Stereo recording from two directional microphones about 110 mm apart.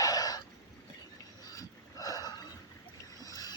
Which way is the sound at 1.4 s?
35° left (ahead or behind).